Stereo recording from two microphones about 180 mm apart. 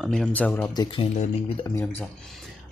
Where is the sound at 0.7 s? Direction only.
25° left (ahead or behind).